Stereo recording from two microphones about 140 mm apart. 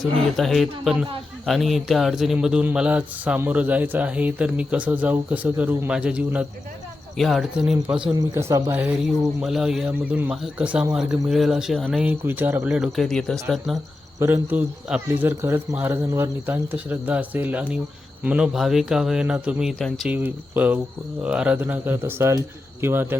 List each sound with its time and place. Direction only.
0.0 s a man's voice: centre (ahead or behind)
8.1 s speech: 20° right (ahead or behind)
9.4 s speech: centre (ahead or behind)
12.0 s a man's voice: 15° right (ahead or behind)
12.7 s speech: centre (ahead or behind)
14.2 s a man's voice: 20° right (ahead or behind); by 20.1 s centre (ahead or behind)
20.1 s a man's voice: 15° right (ahead or behind)